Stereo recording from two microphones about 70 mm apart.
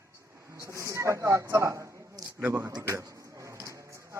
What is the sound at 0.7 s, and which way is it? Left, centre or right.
Speech, right.